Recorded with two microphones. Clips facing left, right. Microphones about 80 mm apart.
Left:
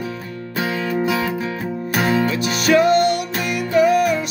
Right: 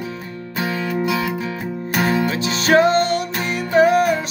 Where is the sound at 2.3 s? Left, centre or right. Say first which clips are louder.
Even; right.